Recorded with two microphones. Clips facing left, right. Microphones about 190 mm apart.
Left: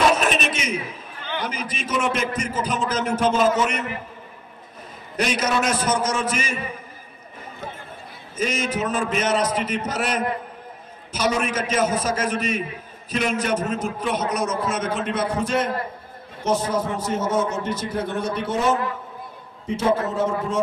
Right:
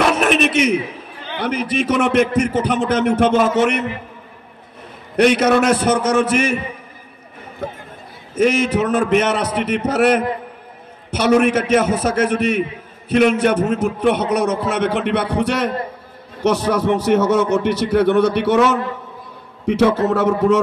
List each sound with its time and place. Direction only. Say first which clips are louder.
0.0 s a sound: right 4 dB; 65° right (ahead or behind)
1.4 s a man's voice: right 13 dB; 65° right (ahead or behind)
5.1 s a man's voice: right 9 dB; 65° right (ahead or behind)
8.4 s a man's voice: right 9 dB; 65° right (ahead or behind)